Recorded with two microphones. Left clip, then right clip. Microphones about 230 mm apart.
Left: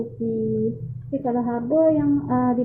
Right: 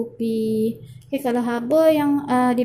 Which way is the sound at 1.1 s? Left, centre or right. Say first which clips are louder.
Right 2 dB; right.